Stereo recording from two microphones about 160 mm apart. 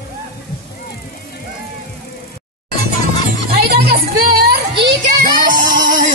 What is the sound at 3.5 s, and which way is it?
Music, 75° right (ahead or behind).